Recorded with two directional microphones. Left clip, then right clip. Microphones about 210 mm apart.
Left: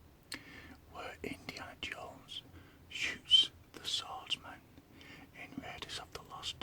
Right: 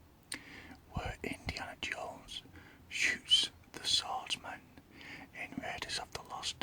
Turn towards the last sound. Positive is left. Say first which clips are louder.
# right 3 dB
turn(degrees=-15)  # may be behind; listen again after turning